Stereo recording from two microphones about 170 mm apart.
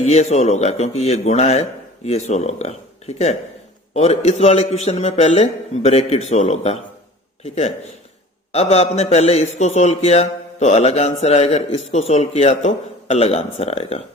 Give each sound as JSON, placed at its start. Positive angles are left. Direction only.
{"t": 0.0, "sound": "speech", "side_deg": 40}